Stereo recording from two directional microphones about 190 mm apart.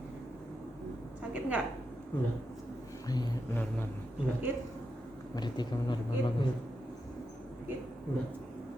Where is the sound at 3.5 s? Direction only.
10° left (ahead or behind).